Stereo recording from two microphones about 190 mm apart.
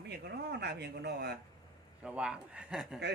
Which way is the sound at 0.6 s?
60° right (ahead or behind).